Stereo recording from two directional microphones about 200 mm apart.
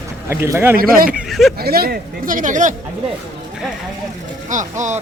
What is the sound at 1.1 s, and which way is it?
Speech, centre (ahead or behind).